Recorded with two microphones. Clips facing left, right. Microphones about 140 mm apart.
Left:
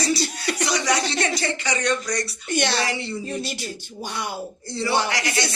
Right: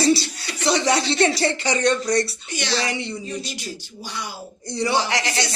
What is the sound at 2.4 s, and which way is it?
Speech, 55° left (ahead or behind).